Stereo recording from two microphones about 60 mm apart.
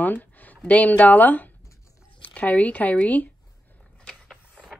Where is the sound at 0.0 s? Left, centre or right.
Left.